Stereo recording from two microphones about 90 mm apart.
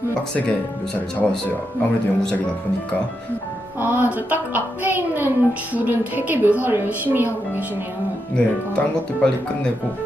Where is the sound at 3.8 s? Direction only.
20° right (ahead or behind).